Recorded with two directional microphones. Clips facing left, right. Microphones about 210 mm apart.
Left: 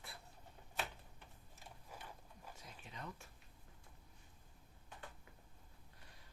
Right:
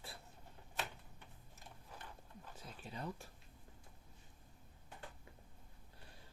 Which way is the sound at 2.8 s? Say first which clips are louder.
Right 6 dB; 35° right (ahead or behind).